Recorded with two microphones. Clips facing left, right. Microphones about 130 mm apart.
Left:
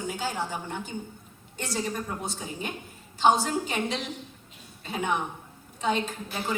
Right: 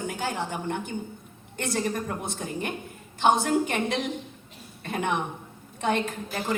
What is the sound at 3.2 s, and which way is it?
A woman's voice, 55° right (ahead or behind).